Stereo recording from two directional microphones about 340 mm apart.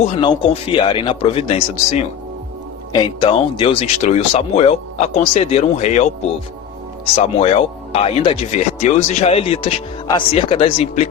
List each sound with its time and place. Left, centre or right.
0.0 s speech: centre
2.9 s speech: centre
7.2 s speech: centre